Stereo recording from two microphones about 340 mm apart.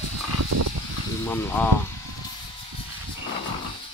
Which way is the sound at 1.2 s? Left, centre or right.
Centre.